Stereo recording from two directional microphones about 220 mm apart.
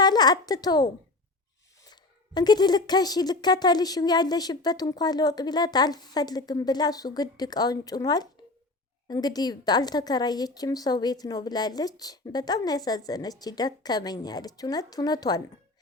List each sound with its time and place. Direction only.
0.0 s a woman's voice: 20° left (ahead or behind)